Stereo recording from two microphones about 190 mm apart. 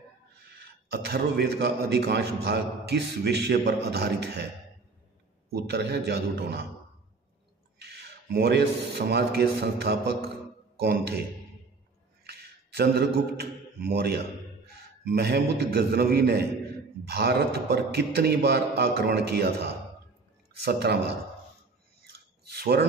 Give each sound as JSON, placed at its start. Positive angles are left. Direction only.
{"t": 0.4, "sound": "a man's voice", "side_deg": -60}
{"t": 5.5, "sound": "a man's voice", "side_deg": -60}
{"t": 7.8, "sound": "a man's voice", "side_deg": -60}
{"t": 12.3, "sound": "a man's voice", "side_deg": -55}
{"t": 22.1, "sound": "a sound", "side_deg": -55}